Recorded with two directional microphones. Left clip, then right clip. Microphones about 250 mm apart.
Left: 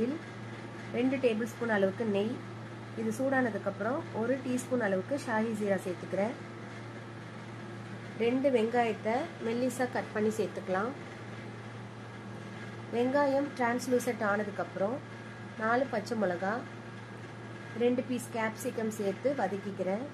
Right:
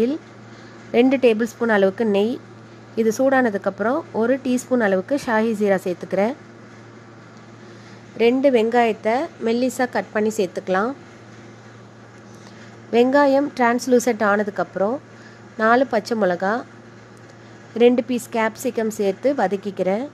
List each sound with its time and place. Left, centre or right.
0.9 s a woman's voice: right
8.2 s speech: right
12.9 s speech: right
17.7 s speech: right